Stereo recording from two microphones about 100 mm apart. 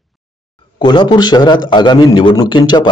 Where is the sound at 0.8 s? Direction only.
50° left (ahead or behind).